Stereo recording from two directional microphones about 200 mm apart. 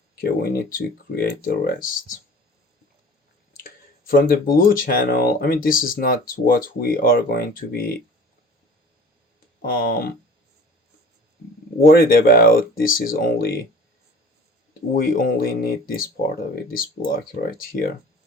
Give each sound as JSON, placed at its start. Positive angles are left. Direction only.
{"t": 0.2, "sound": "speech", "side_deg": 45}
{"t": 4.2, "sound": "speech", "side_deg": 45}
{"t": 9.6, "sound": "speech", "side_deg": 45}
{"t": 11.8, "sound": "speech", "side_deg": 45}
{"t": 14.7, "sound": "speech", "side_deg": 45}